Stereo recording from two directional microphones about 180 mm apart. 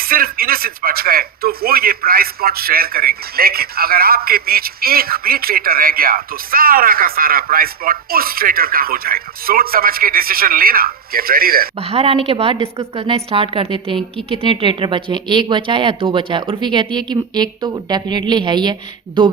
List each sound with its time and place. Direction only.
0.0 s speech: 55° right (ahead or behind)
11.8 s a woman's voice: 35° right (ahead or behind)